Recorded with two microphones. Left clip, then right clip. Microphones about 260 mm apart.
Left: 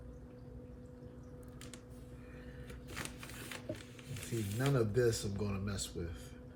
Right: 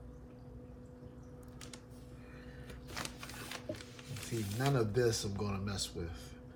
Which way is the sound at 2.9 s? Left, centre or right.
Centre.